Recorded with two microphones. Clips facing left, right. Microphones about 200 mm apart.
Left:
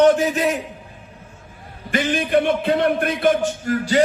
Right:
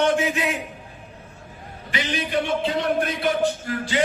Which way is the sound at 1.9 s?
50° left (ahead or behind).